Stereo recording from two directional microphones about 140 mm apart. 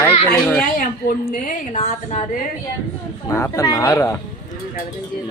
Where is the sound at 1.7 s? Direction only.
50° left (ahead or behind).